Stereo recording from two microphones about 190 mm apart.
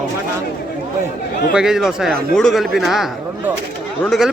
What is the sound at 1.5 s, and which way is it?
Speech, 5° right (ahead or behind).